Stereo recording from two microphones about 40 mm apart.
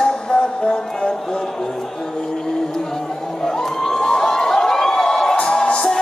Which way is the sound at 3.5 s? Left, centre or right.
Centre.